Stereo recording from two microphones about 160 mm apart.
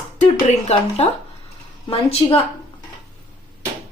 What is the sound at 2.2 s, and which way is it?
Speech, 30° left (ahead or behind).